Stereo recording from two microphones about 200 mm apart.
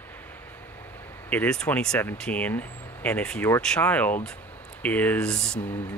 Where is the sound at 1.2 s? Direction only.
5° left (ahead or behind).